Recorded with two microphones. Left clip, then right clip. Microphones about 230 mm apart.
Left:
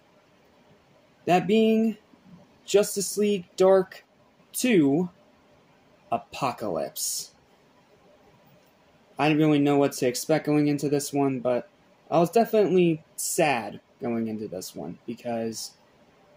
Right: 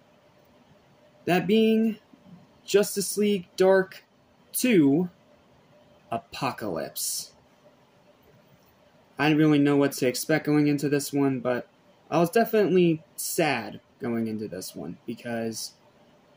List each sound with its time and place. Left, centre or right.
1.2 s speech: centre
6.0 s speech: centre
9.1 s speech: centre